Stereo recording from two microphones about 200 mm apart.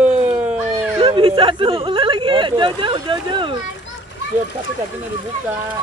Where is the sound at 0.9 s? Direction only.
25° right (ahead or behind).